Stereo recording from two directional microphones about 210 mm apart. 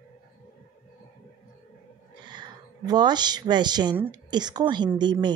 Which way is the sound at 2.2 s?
20° right (ahead or behind).